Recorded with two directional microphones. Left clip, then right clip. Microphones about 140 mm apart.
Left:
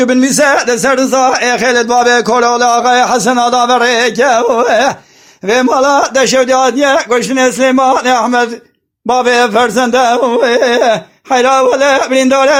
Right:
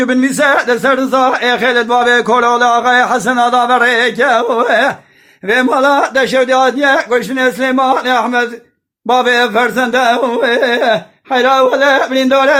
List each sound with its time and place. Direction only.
0.2 s a man's voice: 30° left (ahead or behind)
9.0 s a man's voice: 25° left (ahead or behind)